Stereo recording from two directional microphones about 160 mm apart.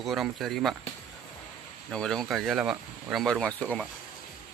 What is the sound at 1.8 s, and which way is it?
Speech, 5° left (ahead or behind).